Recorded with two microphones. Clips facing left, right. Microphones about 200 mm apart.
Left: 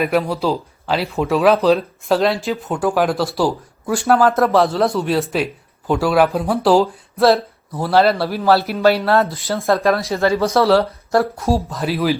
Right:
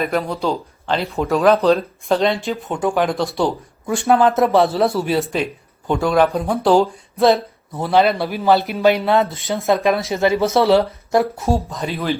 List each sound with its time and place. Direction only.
0.0 s a man's voice: 5° left (ahead or behind)
10.1 s speech: 20° right (ahead or behind)
11.3 s a man's voice: centre (ahead or behind)